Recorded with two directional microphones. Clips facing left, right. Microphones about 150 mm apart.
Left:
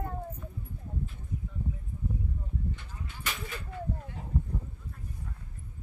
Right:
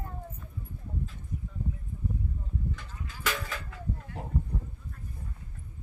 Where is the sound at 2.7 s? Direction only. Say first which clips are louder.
Right 1 dB; 90° right.